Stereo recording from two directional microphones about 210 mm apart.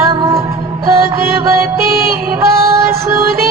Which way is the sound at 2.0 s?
45° right (ahead or behind).